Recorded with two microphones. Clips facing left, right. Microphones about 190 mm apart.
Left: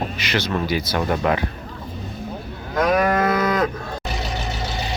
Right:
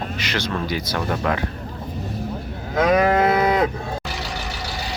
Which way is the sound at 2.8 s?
25° right (ahead or behind).